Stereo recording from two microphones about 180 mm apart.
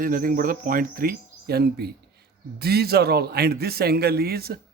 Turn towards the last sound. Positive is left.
turn(degrees=-60)  # may be behind; listen again after turning